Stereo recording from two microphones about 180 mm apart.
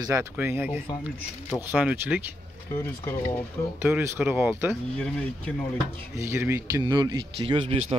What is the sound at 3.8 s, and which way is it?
Speech, 10° right (ahead or behind).